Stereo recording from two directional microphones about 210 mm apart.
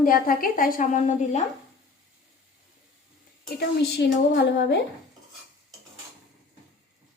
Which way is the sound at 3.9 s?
55° left (ahead or behind).